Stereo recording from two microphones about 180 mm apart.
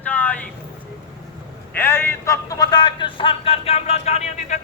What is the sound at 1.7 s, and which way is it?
A man's voice, 15° left (ahead or behind).